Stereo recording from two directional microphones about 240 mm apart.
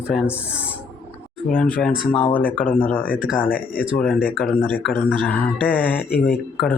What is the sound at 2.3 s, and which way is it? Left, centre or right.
Speech, centre.